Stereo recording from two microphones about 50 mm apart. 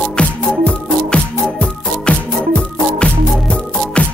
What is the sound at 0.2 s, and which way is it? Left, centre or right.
Music, left.